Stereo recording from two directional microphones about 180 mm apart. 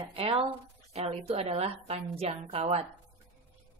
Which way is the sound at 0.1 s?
30° right (ahead or behind).